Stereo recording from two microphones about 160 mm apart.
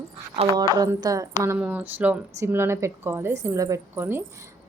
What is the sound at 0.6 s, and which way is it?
A woman's voice, 25° right (ahead or behind).